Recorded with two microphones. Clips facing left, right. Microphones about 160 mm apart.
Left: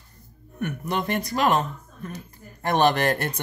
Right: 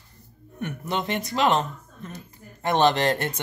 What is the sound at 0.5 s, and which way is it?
Speech, 25° right (ahead or behind).